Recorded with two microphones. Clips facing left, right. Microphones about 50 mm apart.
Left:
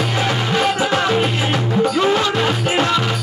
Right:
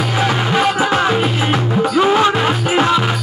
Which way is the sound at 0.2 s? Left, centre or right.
Centre.